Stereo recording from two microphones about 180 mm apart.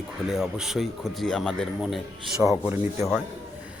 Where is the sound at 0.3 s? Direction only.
Centre (ahead or behind).